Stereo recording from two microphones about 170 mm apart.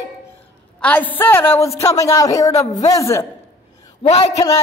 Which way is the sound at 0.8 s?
10° left (ahead or behind).